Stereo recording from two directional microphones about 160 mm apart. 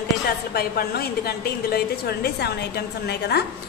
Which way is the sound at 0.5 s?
80° left.